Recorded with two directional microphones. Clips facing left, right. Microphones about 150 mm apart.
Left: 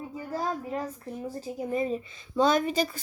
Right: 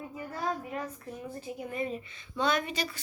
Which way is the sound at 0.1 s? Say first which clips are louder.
Left 3 dB; 35° left (ahead or behind).